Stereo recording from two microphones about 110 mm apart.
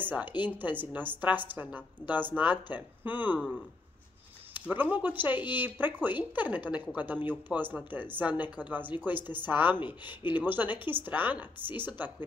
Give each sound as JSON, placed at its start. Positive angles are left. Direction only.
{"t": 0.0, "sound": "a woman's voice", "side_deg": -15}
{"t": 3.3, "sound": "speech", "side_deg": 0}
{"t": 4.6, "sound": "a woman's voice", "side_deg": -15}